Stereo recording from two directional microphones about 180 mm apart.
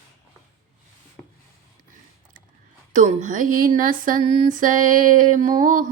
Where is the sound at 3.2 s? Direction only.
45° right (ahead or behind).